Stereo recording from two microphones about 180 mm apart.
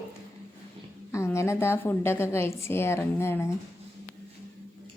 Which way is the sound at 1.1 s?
15° left (ahead or behind).